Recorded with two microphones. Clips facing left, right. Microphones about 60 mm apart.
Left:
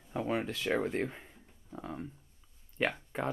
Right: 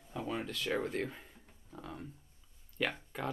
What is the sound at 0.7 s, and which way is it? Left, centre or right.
Speech, centre.